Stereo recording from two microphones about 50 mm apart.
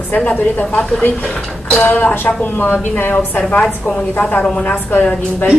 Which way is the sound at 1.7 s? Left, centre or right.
Left.